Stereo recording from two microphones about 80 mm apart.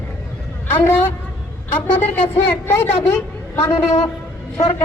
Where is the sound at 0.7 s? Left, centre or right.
Left.